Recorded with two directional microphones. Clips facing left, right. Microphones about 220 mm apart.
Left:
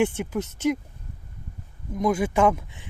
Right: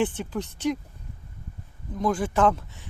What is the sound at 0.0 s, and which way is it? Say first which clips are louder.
Speech: left 3 dB; 10° left (ahead or behind).